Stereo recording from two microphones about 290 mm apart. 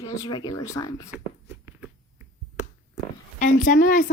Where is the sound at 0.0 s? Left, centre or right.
Centre.